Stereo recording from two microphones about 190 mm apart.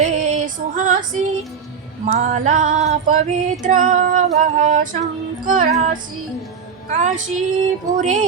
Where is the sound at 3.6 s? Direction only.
40° right (ahead or behind).